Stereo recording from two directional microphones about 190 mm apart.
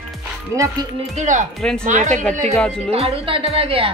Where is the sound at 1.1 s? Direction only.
40° right (ahead or behind).